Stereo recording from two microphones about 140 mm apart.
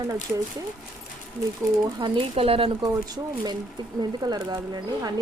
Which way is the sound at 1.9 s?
35° right (ahead or behind).